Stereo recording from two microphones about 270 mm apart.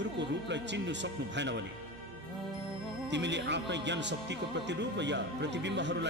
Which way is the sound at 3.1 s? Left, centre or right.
Right.